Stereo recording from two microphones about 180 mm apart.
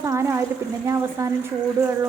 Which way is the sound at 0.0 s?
15° right (ahead or behind).